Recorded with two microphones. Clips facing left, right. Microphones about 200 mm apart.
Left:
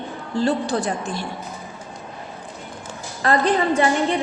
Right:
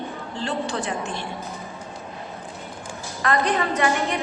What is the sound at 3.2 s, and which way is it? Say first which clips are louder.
Speech: left 3 dB; 30° left (ahead or behind).